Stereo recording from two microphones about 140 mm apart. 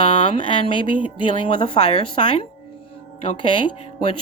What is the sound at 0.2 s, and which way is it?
Speech, 35° left (ahead or behind).